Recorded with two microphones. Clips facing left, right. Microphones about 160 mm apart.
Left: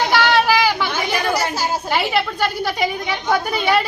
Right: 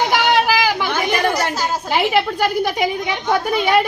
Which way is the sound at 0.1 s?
15° right (ahead or behind).